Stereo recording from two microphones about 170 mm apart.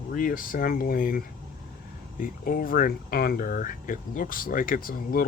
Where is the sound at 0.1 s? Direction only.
55° left (ahead or behind).